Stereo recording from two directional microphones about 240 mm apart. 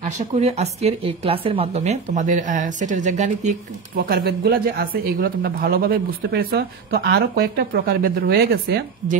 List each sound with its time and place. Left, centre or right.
0.0 s a woman's voice: right